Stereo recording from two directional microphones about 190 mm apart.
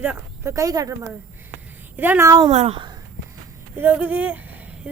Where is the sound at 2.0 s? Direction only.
10° right (ahead or behind).